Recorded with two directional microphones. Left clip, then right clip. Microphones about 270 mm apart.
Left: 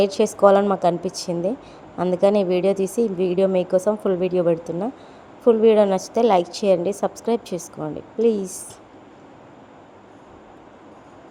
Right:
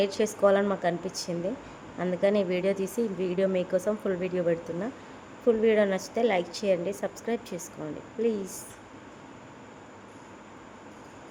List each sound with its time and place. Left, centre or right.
0.0 s a woman's voice: centre